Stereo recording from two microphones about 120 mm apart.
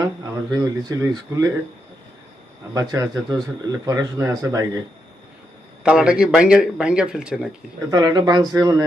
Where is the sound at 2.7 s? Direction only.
30° right (ahead or behind).